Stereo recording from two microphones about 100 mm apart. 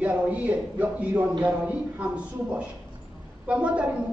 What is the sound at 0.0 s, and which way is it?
A man's voice, 15° right (ahead or behind).